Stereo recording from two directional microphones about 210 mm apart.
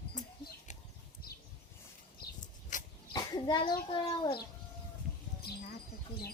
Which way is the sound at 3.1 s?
20° left (ahead or behind).